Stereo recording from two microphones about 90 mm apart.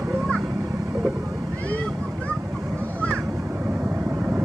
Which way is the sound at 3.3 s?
25° right (ahead or behind).